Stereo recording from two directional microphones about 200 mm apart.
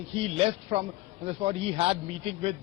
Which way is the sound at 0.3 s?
30° right (ahead or behind).